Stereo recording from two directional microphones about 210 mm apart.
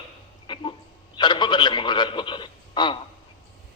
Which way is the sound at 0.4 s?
20° left (ahead or behind).